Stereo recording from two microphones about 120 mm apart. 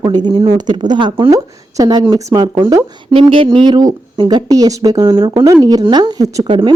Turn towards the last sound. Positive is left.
turn(degrees=-35)  # may be behind; listen again after turning